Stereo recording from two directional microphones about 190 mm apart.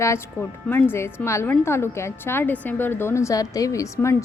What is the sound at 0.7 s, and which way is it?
A woman's voice, 10° left (ahead or behind).